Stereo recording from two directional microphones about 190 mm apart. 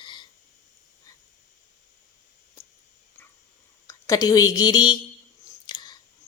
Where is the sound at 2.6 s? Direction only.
20° left (ahead or behind).